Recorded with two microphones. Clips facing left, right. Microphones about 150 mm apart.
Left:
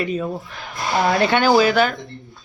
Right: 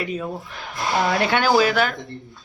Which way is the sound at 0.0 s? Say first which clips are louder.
Left 4 dB; 5° right (ahead or behind).